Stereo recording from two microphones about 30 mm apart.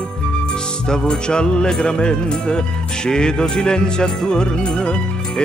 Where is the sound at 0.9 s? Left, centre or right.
Left.